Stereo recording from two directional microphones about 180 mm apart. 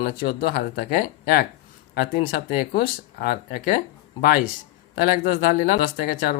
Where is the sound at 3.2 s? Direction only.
55° left (ahead or behind).